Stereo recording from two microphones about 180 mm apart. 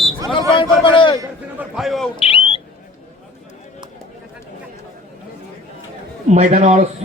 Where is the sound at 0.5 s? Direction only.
25° left (ahead or behind).